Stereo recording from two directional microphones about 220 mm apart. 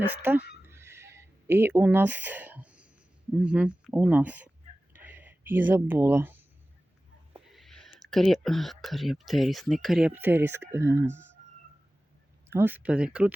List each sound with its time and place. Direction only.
0.1 s speech: 10° right (ahead or behind)
0.7 s a sound: 10° right (ahead or behind)
3.3 s speech: 5° right (ahead or behind)
4.9 s a sound: 10° right (ahead or behind)
7.5 s speech: centre (ahead or behind)
12.5 s speech: 10° right (ahead or behind)